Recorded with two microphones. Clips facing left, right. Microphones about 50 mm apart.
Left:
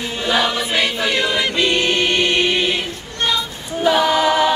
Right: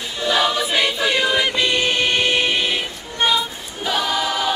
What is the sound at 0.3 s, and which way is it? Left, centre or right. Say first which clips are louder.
Choir: even; centre.